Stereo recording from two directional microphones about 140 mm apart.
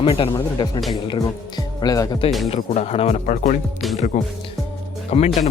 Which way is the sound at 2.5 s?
45° left (ahead or behind).